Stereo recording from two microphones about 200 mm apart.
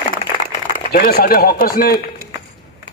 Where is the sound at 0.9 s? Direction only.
45° left (ahead or behind).